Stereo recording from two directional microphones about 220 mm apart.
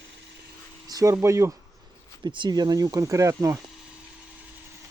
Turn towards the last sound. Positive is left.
turn(degrees=-15)  # may be behind; listen again after turning